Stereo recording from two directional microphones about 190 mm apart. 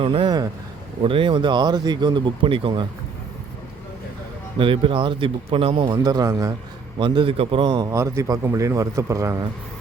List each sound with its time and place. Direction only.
0.0 s speech: 30° right (ahead or behind)
4.5 s a man's voice: 25° right (ahead or behind)